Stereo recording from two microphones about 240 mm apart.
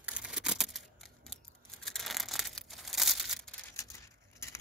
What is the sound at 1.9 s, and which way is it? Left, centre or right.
Crumpling, centre.